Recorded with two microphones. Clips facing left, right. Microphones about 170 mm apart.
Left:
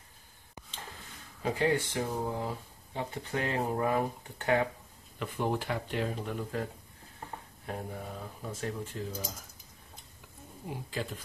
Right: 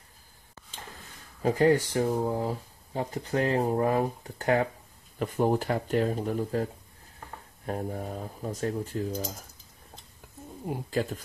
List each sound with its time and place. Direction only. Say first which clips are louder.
0.6 s a sound: left 3 dB; 15° left (ahead or behind)
1.4 s speech: right 6 dB; 40° right (ahead or behind)
7.6 s speech: right 7 dB; 40° right (ahead or behind)
10.7 s speech: right 7 dB; 45° right (ahead or behind)